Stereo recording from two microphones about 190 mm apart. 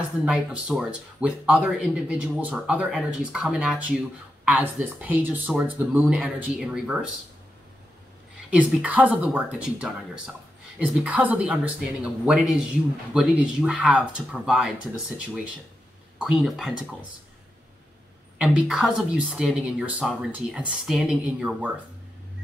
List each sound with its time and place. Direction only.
0.2 s speech: 5° right (ahead or behind)
8.5 s speech: 5° right (ahead or behind)
18.4 s speech: 5° right (ahead or behind)